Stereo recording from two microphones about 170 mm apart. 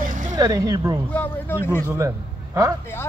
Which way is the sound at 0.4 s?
20° right (ahead or behind).